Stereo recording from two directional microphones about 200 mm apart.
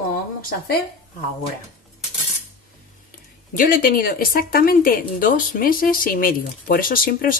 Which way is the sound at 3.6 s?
45° left (ahead or behind).